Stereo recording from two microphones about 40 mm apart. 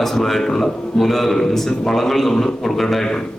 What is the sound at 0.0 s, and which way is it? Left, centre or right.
A man's voice, centre.